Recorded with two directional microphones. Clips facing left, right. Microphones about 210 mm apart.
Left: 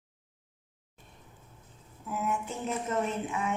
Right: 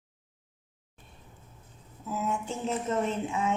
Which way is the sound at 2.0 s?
25° right (ahead or behind).